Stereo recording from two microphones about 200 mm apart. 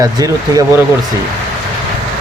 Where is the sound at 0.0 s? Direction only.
15° right (ahead or behind).